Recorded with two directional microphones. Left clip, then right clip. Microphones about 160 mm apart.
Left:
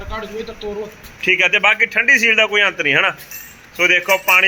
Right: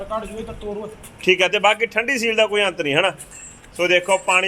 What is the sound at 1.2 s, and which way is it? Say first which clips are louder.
A man's voice: left 3 dB; 10° right (ahead or behind).